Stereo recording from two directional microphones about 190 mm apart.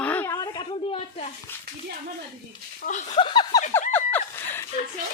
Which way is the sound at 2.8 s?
40° left (ahead or behind).